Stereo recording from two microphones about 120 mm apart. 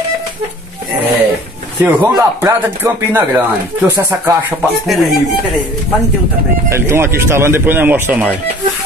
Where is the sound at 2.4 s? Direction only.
20° right (ahead or behind).